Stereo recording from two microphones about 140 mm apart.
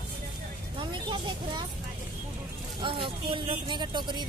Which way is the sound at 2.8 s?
35° right (ahead or behind).